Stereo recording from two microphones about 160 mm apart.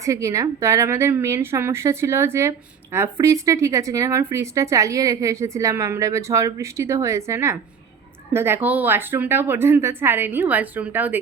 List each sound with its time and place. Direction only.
0.0 s a woman's voice: 20° right (ahead or behind)